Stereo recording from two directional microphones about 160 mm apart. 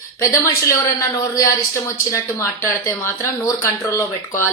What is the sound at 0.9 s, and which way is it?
Speech, 20° left (ahead or behind).